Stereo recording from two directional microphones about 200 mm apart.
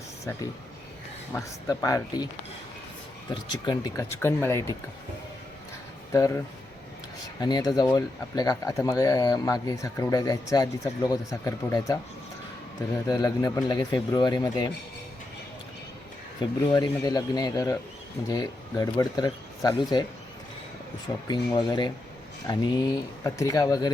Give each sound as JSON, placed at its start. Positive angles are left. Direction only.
{"t": 1.3, "sound": "speech", "side_deg": 10}
{"t": 6.1, "sound": "speech", "side_deg": 15}
{"t": 7.4, "sound": "speech", "side_deg": 20}
{"t": 13.1, "sound": "speech", "side_deg": 20}
{"t": 16.6, "sound": "speech", "side_deg": 20}
{"t": 21.2, "sound": "speech", "side_deg": 20}